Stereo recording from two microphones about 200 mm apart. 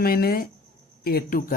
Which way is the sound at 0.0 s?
50° left (ahead or behind).